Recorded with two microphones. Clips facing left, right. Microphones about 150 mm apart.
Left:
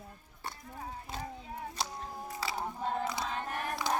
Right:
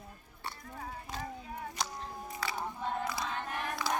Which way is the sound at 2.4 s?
30° left (ahead or behind).